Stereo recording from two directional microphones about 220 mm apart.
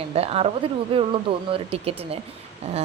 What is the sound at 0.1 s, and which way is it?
A woman's voice, 25° right (ahead or behind).